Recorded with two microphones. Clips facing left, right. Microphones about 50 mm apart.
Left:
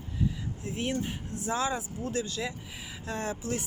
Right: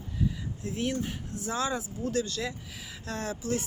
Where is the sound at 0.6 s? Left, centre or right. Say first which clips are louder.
Right 1 dB; left.